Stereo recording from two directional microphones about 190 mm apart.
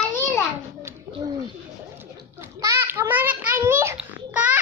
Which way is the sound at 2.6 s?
15° right (ahead or behind).